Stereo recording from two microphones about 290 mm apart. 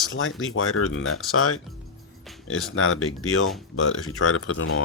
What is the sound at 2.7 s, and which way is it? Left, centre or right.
Speech, left.